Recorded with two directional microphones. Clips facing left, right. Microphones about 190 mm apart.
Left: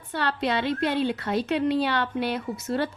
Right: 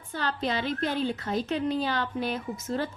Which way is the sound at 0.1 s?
70° left (ahead or behind).